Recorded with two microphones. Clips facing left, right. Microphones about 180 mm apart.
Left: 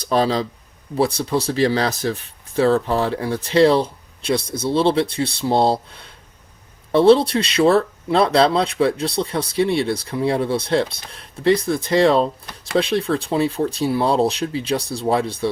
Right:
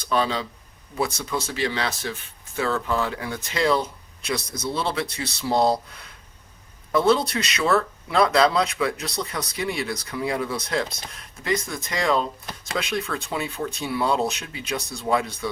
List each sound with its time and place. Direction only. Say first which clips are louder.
0.0 s speech: left 5 dB; 35° left (ahead or behind)